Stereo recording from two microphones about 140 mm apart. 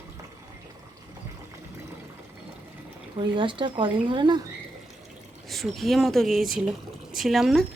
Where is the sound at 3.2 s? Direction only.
35° right (ahead or behind).